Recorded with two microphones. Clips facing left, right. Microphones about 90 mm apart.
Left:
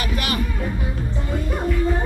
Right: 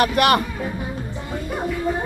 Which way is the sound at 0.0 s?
65° right (ahead or behind).